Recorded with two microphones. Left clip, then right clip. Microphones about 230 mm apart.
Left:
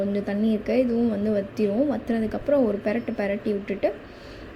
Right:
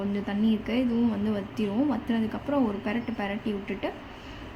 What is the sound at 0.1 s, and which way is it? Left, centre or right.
A woman's voice, centre.